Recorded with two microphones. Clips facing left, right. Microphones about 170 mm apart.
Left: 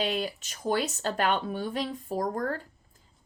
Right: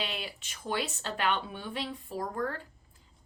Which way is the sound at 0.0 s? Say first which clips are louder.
Left 8 dB; 40° left (ahead or behind).